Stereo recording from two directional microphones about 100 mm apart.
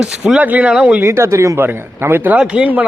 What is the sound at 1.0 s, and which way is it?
Speech, 25° right (ahead or behind).